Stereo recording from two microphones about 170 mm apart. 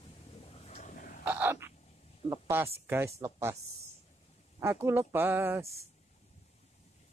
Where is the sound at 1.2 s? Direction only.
10° right (ahead or behind).